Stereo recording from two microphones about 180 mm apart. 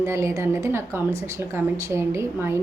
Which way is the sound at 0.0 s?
15° right (ahead or behind).